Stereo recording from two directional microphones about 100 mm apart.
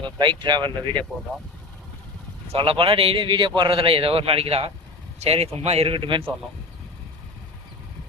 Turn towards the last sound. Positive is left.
turn(degrees=-60)  # may be behind; listen again after turning